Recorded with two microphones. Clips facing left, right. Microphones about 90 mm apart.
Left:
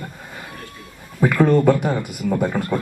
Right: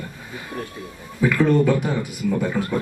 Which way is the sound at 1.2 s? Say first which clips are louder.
Left 2 dB; 50° left (ahead or behind).